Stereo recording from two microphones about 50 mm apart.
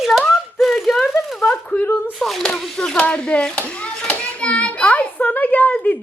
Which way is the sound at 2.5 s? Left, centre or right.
Centre.